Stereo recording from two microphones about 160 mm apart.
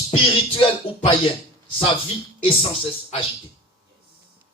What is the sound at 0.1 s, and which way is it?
Music, 35° left (ahead or behind).